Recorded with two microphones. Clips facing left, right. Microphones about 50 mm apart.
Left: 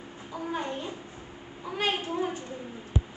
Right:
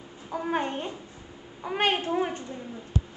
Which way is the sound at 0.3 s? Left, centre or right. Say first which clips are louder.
Right 4 dB; right.